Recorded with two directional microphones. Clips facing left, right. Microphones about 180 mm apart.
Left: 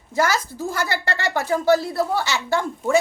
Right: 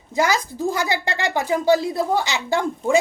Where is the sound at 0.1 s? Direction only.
15° right (ahead or behind).